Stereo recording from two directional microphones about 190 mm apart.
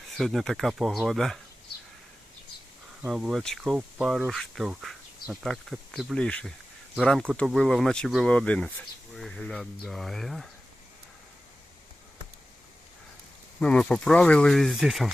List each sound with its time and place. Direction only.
0.1 s speech: centre (ahead or behind)
3.1 s speech: 5° right (ahead or behind)
13.6 s speech: 5° left (ahead or behind)